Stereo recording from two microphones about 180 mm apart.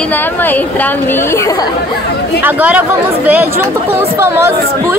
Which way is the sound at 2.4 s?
10° right (ahead or behind).